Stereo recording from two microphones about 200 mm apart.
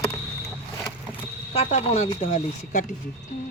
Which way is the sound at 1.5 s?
30° left (ahead or behind).